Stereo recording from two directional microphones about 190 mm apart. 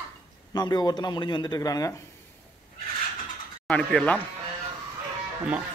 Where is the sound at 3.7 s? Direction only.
5° left (ahead or behind).